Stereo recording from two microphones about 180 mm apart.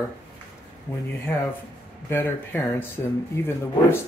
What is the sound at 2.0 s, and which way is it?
Speech, 15° left (ahead or behind).